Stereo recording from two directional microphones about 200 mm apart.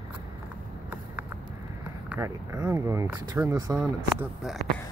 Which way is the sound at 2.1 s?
15° right (ahead or behind).